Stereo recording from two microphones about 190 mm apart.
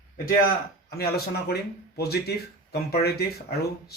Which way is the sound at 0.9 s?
55° left (ahead or behind).